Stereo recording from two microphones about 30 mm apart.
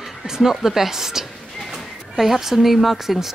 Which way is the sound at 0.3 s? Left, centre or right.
Centre.